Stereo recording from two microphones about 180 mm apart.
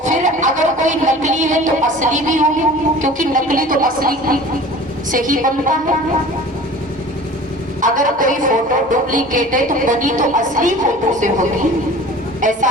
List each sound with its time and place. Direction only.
0.0 s music: 45° right (ahead or behind)
7.8 s music: 45° right (ahead or behind)